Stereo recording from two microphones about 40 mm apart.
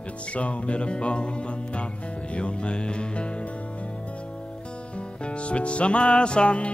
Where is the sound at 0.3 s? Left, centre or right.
Left.